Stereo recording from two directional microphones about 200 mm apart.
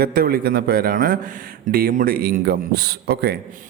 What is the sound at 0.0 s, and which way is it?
Speech, 50° right (ahead or behind).